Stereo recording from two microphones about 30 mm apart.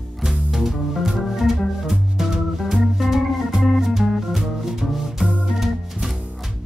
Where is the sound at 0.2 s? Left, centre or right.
Centre.